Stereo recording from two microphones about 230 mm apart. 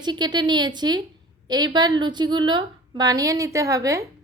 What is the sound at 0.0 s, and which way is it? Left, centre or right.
A woman's voice, centre.